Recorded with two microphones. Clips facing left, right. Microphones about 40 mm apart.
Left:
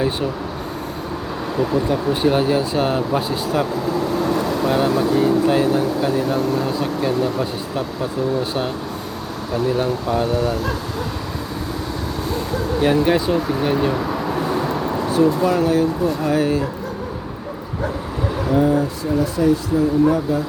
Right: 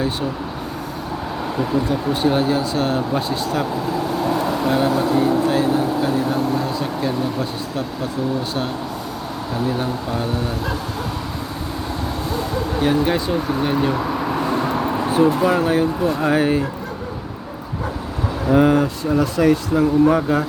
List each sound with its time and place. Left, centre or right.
1.9 s speech: centre
9.6 s speech: centre
12.8 s speech: centre
14.3 s vehicle: centre
14.6 s a sound: right
15.4 s speech: right
18.5 s speech: right
20.1 s speech: right